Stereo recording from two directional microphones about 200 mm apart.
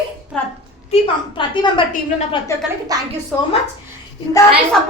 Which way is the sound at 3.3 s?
5° left (ahead or behind).